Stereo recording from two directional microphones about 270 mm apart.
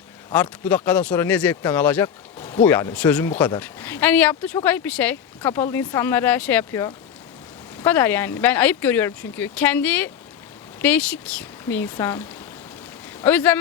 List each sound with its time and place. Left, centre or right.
0.3 s speech: centre
2.4 s a sound: left
2.6 s speech: centre
13.2 s speech: centre